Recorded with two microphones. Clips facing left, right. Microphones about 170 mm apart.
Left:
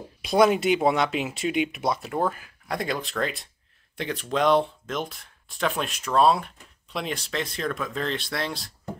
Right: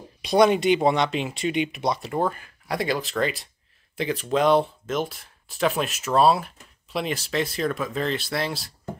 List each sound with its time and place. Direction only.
0.2 s speech: centre (ahead or behind)